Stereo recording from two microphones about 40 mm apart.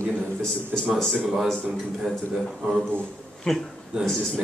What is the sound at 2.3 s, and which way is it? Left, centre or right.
Speech, centre.